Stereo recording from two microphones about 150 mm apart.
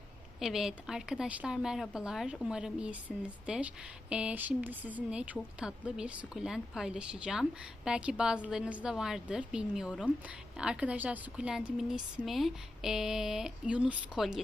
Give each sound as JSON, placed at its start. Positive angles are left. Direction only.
{"t": 0.3, "sound": "a woman's voice", "side_deg": 0}